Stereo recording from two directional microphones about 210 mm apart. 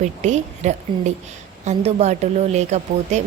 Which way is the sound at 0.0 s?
35° right (ahead or behind).